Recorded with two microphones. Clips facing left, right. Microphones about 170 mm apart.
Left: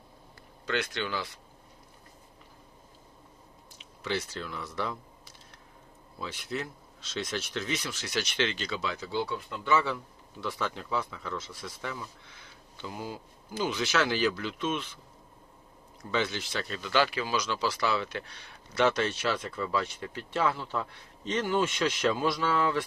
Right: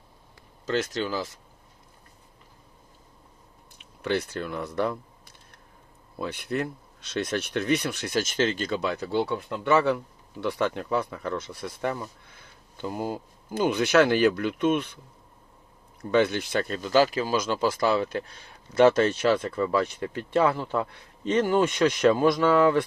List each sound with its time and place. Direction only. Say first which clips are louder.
0.7 s speech: right 5 dB; 40° right (ahead or behind)
3.8 s speech: right 6 dB; 60° right (ahead or behind)
6.1 s speech: right 6 dB; 60° right (ahead or behind)
16.1 s speech: right 8 dB; 55° right (ahead or behind)